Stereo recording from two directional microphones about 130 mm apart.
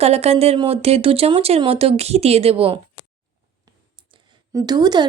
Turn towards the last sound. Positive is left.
turn(degrees=-35)  # may be behind; listen again after turning